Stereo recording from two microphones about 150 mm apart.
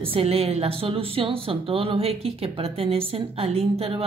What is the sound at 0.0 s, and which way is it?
A woman's voice, 40° right (ahead or behind).